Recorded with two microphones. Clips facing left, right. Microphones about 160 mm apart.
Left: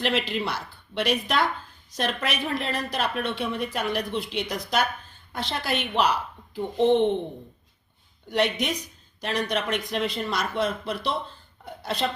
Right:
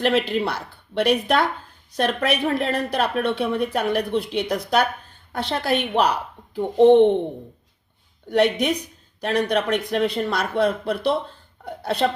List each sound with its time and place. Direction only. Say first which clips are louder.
0.0 s speech: right 6 dB; 50° right (ahead or behind)
8.3 s speech: right 6 dB; 55° right (ahead or behind)
10.2 s speech: right 5 dB; 55° right (ahead or behind)
11.6 s a sound: right 6 dB; 60° right (ahead or behind)